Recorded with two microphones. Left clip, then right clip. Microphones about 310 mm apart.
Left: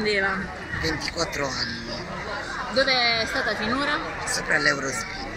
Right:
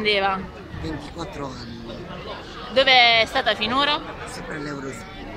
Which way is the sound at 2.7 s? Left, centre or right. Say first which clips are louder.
Right 7 dB; right.